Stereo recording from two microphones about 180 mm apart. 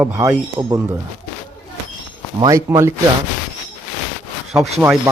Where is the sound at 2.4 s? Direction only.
15° right (ahead or behind).